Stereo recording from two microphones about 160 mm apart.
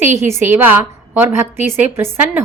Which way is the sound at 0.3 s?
15° right (ahead or behind).